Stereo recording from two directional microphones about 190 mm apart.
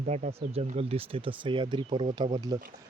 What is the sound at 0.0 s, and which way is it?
Speech, 40° right (ahead or behind).